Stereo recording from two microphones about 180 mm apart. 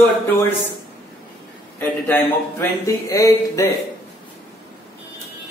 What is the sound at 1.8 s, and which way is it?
A man's voice, 10° left (ahead or behind).